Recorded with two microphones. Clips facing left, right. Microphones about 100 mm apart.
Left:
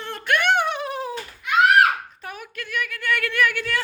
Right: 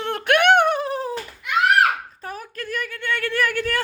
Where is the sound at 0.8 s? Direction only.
35° right (ahead or behind).